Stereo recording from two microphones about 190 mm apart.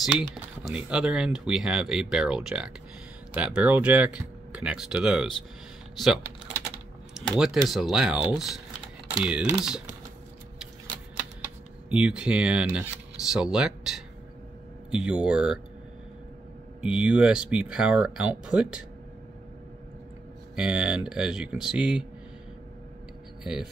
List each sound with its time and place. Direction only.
0.7 s speech: 5° right (ahead or behind)
7.2 s speech: 5° right (ahead or behind)
11.9 s speech: 5° right (ahead or behind)
16.8 s speech: 5° right (ahead or behind)
20.5 s speech: 5° right (ahead or behind)